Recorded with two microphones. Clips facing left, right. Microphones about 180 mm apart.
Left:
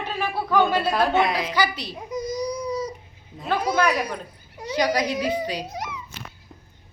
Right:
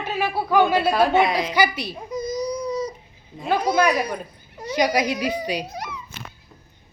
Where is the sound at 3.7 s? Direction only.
10° right (ahead or behind).